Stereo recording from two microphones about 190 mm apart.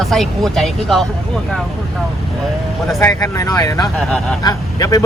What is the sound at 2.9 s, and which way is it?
Speech, 15° left (ahead or behind).